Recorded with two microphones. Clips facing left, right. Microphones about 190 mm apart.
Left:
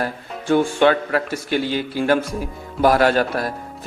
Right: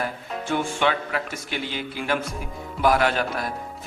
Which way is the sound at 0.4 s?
35° left (ahead or behind).